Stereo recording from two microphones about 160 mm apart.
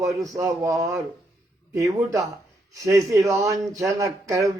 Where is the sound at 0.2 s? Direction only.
20° right (ahead or behind).